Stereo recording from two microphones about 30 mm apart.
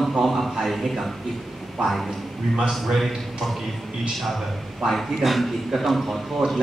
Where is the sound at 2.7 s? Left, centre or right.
Centre.